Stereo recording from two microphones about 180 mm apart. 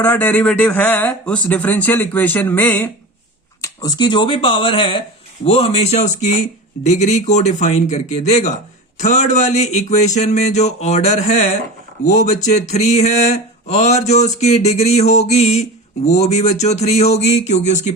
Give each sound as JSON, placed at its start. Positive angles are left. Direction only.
{"t": 0.0, "sound": "a man's voice", "side_deg": 10}
{"t": 3.6, "sound": "speech", "side_deg": 20}